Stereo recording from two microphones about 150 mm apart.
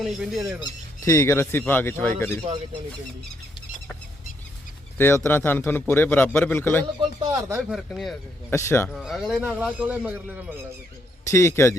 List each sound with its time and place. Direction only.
0.0 s speech: centre (ahead or behind)
0.6 s speech: 20° left (ahead or behind)
4.9 s speech: 15° left (ahead or behind)
7.3 s a sound: 20° right (ahead or behind)
7.7 s speech: centre (ahead or behind)
8.4 s speech: 15° left (ahead or behind)
8.9 s speech: centre (ahead or behind)
11.3 s a man's voice: 20° left (ahead or behind)